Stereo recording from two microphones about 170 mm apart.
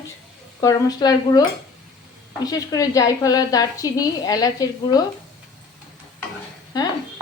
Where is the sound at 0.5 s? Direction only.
20° left (ahead or behind).